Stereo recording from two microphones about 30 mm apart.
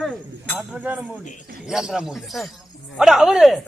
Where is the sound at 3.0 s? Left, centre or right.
Centre.